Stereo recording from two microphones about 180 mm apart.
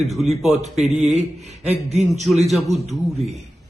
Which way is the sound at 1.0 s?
40° right (ahead or behind).